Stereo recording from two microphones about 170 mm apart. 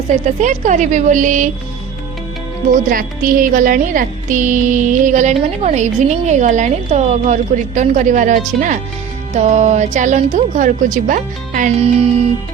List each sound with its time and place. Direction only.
0.3 s speech: 45° right (ahead or behind)
2.9 s speech: 55° right (ahead or behind)